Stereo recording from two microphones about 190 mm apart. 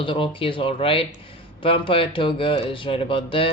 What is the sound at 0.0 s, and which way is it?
Speech, 25° left (ahead or behind).